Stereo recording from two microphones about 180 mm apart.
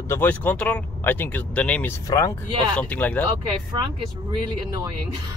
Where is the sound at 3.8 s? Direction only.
20° right (ahead or behind).